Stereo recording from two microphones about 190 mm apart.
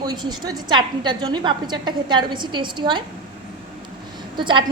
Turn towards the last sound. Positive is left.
turn(degrees=-25)  # may be behind; listen again after turning